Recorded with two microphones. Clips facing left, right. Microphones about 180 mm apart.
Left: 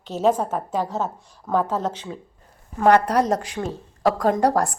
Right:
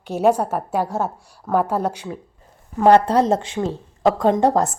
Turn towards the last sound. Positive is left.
turn(degrees=-20)  # may be behind; listen again after turning